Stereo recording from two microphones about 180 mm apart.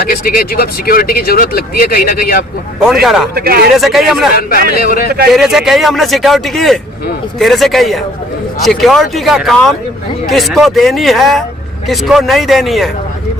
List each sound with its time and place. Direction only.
0.0 s speech: 55° left (ahead or behind)
2.8 s a man's voice: centre (ahead or behind)
3.3 s speech: 55° right (ahead or behind)
3.8 s a man's voice: centre (ahead or behind)
4.4 s a man's voice: 55° left (ahead or behind)
5.3 s a man's voice: centre (ahead or behind)